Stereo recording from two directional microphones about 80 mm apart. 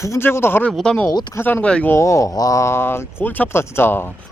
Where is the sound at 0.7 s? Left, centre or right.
Centre.